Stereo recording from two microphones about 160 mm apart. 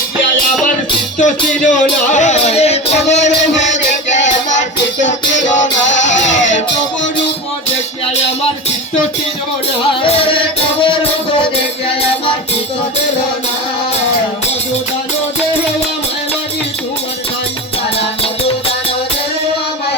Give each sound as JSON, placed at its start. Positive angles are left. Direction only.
{"t": 1.2, "sound": "music", "side_deg": 50}
{"t": 10.0, "sound": "music", "side_deg": 35}